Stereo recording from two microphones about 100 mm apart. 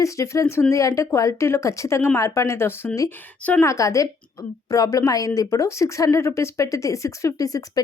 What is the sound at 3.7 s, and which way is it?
Speech, 35° left (ahead or behind).